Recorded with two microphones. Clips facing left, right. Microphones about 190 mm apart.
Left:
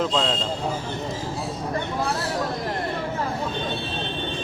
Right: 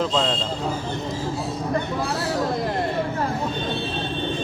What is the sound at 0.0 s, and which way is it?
Speech, centre (ahead or behind).